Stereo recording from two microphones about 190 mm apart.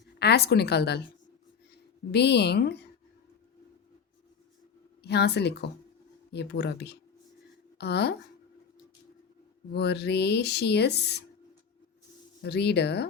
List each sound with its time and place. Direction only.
0.2 s speech: 60° left (ahead or behind)
2.1 s speech: 60° left (ahead or behind)
5.0 s speech: 60° left (ahead or behind)
9.7 s speech: 60° left (ahead or behind)
12.4 s speech: 60° left (ahead or behind)